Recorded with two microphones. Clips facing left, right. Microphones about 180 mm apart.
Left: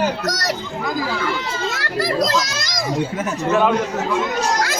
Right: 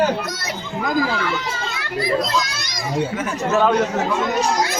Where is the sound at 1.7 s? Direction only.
90° left.